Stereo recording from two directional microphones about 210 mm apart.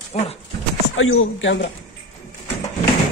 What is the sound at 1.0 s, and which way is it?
Speech, 70° left (ahead or behind).